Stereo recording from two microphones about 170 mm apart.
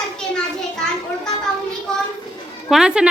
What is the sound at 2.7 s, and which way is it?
Speech, 5° right (ahead or behind).